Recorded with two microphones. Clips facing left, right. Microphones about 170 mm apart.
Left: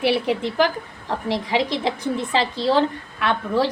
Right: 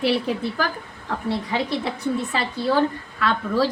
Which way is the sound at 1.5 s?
90° left.